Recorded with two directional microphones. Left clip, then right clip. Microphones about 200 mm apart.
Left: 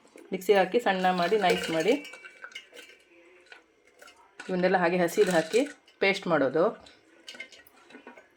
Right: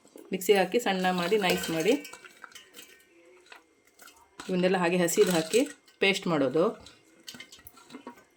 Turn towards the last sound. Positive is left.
turn(degrees=-30)  # may be behind; listen again after turning